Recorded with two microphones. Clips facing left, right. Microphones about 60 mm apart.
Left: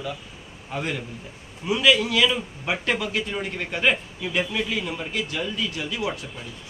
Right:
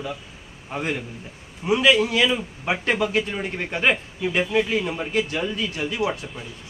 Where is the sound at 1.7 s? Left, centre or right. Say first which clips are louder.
Right 2 dB; right.